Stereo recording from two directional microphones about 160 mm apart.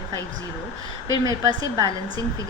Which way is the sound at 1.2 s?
25° right (ahead or behind).